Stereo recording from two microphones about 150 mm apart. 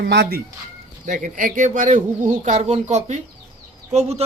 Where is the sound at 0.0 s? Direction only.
90° right.